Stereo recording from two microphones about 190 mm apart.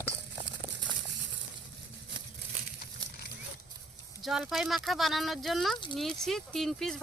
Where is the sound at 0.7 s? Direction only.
75° right (ahead or behind).